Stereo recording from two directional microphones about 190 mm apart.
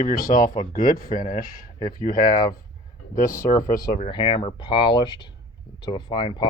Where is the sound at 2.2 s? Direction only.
20° left (ahead or behind).